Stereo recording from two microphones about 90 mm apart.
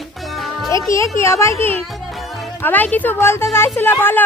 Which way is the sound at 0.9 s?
35° left (ahead or behind).